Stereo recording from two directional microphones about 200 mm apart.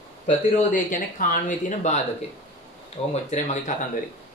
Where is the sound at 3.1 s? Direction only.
35° left (ahead or behind).